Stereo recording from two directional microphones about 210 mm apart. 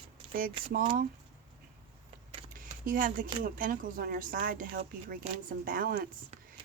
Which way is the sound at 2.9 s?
40° right (ahead or behind).